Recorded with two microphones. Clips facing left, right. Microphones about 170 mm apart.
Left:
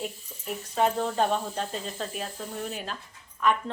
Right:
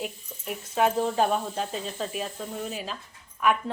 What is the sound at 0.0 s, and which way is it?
A woman's voice, 5° right (ahead or behind).